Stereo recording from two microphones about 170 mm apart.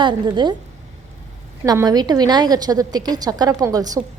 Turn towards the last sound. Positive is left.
turn(degrees=-20)  # may be behind; listen again after turning